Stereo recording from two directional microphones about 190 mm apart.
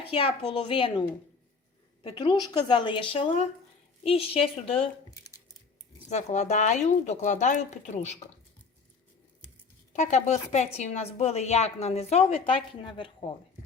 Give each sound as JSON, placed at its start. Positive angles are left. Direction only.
{"t": 0.1, "sound": "a child's voice", "side_deg": 30}
{"t": 5.1, "sound": "a sound", "side_deg": 20}
{"t": 6.1, "sound": "a woman's voice", "side_deg": 35}
{"t": 9.9, "sound": "a woman's voice", "side_deg": 40}